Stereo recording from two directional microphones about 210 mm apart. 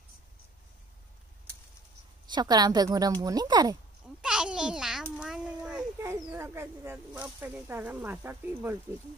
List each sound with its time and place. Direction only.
2.3 s a woman's voice: 20° right (ahead or behind)
4.2 s a child's voice: 5° right (ahead or behind)